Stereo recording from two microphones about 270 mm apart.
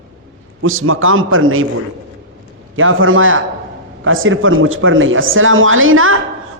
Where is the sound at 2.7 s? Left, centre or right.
Right.